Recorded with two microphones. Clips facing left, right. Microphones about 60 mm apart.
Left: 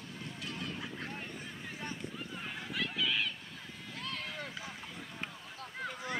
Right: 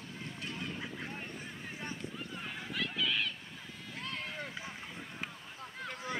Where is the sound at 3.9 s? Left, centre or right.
Right.